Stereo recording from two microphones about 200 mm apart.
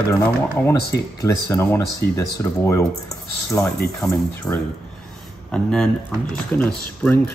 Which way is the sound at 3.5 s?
10° left (ahead or behind).